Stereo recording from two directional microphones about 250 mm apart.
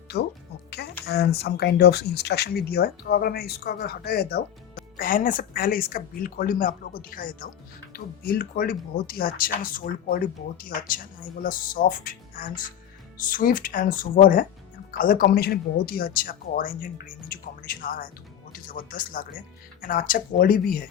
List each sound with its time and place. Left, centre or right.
0.1 s speech: left